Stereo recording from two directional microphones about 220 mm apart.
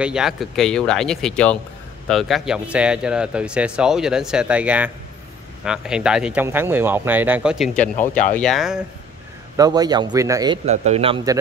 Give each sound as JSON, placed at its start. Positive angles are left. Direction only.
{"t": 0.0, "sound": "speech", "side_deg": -5}
{"t": 9.6, "sound": "speech", "side_deg": -20}
{"t": 10.6, "sound": "a man's voice", "side_deg": -30}